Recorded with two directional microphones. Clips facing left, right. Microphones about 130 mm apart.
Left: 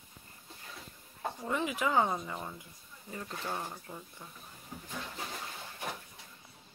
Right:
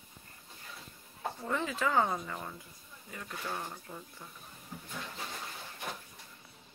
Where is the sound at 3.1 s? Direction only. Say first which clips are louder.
Left 2 dB; 25° left (ahead or behind); by 4.2 s 10° left (ahead or behind).